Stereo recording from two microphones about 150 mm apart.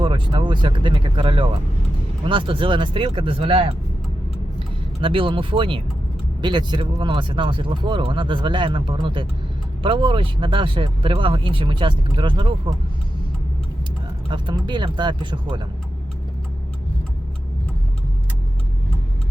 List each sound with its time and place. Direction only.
0.0 s speech: 30° right (ahead or behind)
4.9 s speech: 35° right (ahead or behind)
14.3 s speech: 30° right (ahead or behind)